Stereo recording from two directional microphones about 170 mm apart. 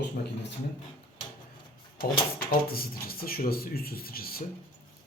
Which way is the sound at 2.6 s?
60° left (ahead or behind).